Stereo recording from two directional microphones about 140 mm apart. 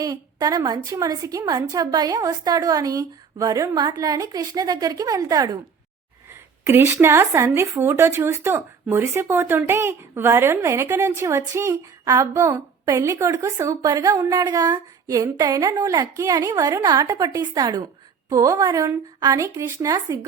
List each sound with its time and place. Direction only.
0.0 s speech: 25° right (ahead or behind)
6.7 s speech: 15° right (ahead or behind)